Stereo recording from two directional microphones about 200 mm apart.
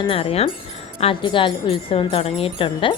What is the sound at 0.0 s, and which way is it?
Music, 30° left (ahead or behind).